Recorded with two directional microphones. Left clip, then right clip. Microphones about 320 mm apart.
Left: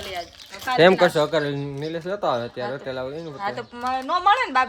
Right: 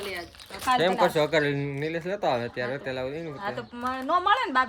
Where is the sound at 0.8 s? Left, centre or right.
Left.